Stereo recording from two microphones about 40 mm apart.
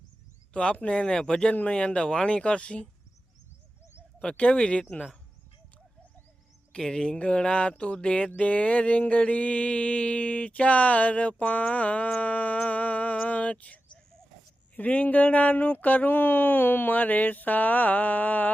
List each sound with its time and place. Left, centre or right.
0.5 s speech: left
4.2 s speech: left
6.7 s speech: centre
8.4 s mantra: left
14.8 s speech: left